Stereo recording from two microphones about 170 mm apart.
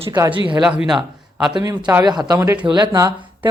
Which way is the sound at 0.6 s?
5° right (ahead or behind).